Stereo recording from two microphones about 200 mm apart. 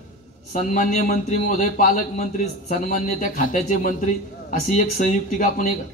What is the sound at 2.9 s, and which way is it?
A man's voice, 45° left (ahead or behind).